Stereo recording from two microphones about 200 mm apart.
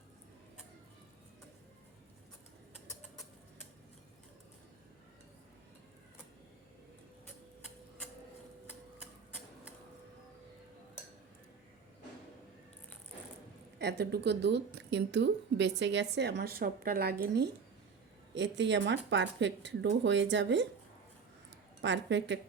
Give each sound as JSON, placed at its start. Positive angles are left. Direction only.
{"t": 13.7, "sound": "speech", "side_deg": -55}
{"t": 21.8, "sound": "speech", "side_deg": -60}